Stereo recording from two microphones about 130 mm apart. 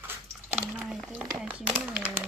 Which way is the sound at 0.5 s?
15° right (ahead or behind).